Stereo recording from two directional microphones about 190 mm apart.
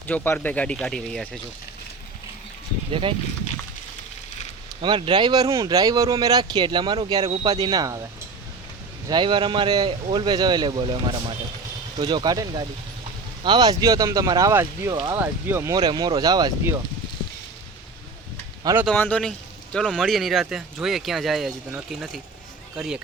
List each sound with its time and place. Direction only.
0.1 s speech: 10° left (ahead or behind)
2.9 s speech: 25° right (ahead or behind)
4.8 s speech: 25° right (ahead or behind)
9.0 s speech: 25° right (ahead or behind)
18.9 s speech: 10° left (ahead or behind)